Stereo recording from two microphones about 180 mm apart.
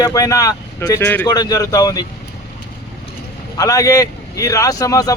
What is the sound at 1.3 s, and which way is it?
Speech, 20° left (ahead or behind).